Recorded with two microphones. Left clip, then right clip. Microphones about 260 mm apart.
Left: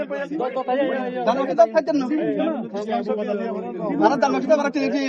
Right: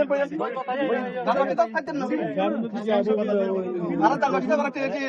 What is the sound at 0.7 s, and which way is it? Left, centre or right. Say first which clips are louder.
A man's voice: left 3 dB; left.